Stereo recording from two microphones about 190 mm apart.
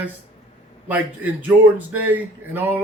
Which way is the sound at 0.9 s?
10° right (ahead or behind).